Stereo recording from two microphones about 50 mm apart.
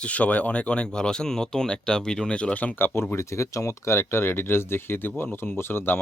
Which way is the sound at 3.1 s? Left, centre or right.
Left.